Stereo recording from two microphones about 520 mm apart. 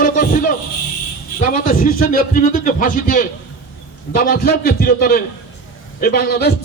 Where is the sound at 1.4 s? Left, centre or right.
Centre.